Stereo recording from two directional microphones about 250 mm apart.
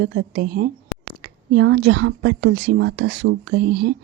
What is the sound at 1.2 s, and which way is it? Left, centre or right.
Speech, right.